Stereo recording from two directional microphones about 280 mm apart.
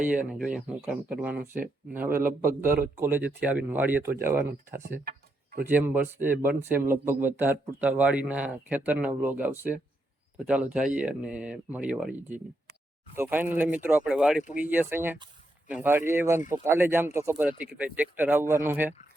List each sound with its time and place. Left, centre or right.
0.0 s speech: centre
2.4 s speech: right
3.0 s a man's voice: centre
5.0 s a sound: right
5.6 s a man's voice: centre
6.3 s speech: right
6.7 s a man's voice: centre
14.4 s speech: left
14.7 s a man's voice: centre